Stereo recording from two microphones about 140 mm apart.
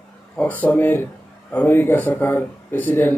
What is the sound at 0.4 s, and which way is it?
Speech, 10° left (ahead or behind).